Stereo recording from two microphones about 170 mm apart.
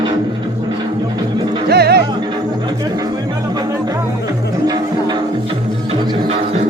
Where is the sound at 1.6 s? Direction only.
70° right (ahead or behind).